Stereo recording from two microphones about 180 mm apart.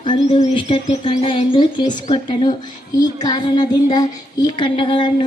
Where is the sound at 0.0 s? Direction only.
30° left (ahead or behind).